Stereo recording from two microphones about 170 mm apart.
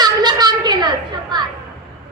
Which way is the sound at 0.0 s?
25° right (ahead or behind).